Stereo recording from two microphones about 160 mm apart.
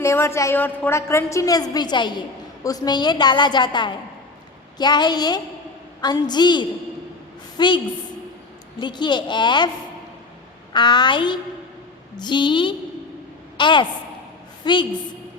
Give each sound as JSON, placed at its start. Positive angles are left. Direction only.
{"t": 0.0, "sound": "a woman's voice", "side_deg": 15}
{"t": 8.8, "sound": "a woman's voice", "side_deg": 30}
{"t": 10.7, "sound": "a woman's voice", "side_deg": 30}